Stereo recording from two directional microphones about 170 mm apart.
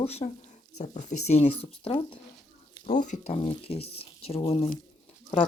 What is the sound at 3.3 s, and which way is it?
Speech, 30° left (ahead or behind).